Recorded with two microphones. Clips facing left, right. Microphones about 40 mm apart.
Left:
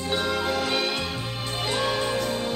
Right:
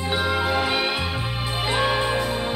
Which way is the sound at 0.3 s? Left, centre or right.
Centre.